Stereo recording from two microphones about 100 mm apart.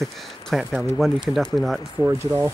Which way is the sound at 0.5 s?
Centre (ahead or behind).